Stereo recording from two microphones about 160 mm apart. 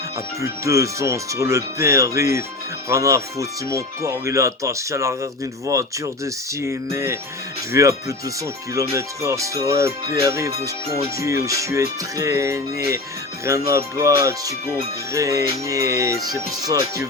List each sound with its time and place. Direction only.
0.4 s speech: 20° right (ahead or behind)